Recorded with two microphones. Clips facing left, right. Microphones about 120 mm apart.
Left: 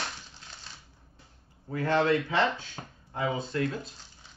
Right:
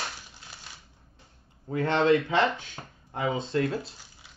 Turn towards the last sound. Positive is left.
turn(degrees=-25)  # may be behind; listen again after turning